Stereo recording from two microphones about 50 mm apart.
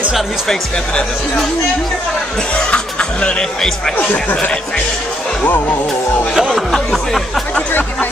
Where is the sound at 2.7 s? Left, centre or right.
Left.